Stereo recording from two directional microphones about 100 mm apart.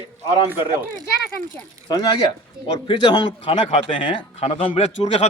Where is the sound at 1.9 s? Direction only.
45° left (ahead or behind); by 5.3 s 90° left.